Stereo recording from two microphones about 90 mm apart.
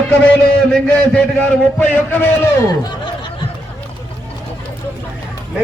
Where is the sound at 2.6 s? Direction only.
45° left (ahead or behind).